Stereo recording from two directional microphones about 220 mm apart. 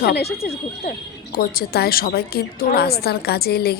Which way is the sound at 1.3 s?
45° left (ahead or behind).